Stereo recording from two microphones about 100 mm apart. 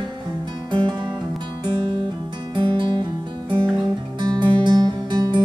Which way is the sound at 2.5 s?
50° right (ahead or behind).